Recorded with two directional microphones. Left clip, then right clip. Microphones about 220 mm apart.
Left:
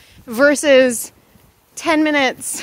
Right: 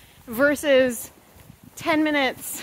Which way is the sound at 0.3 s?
45° left (ahead or behind).